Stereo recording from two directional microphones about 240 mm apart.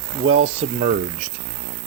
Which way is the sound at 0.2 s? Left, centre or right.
Right.